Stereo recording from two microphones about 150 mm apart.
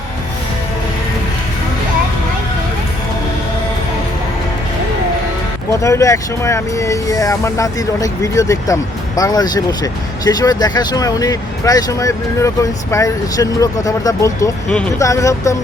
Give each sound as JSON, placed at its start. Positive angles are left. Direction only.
{"t": 5.8, "sound": "speech", "side_deg": 20}